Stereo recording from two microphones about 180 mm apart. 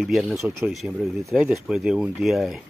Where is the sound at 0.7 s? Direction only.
Centre (ahead or behind).